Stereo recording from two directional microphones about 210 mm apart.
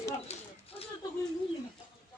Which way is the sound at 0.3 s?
30° left (ahead or behind).